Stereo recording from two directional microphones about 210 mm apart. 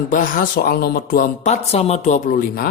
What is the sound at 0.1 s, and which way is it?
Speech, 40° left (ahead or behind).